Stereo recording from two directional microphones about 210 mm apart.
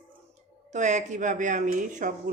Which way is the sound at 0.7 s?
35° right (ahead or behind).